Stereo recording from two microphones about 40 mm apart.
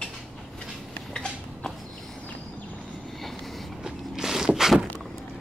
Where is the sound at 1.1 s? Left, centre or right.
Centre.